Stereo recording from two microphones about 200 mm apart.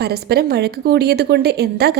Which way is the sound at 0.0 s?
55° right (ahead or behind).